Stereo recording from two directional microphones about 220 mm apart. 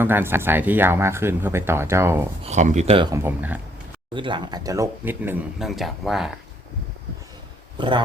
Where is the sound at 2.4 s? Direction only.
30° right (ahead or behind).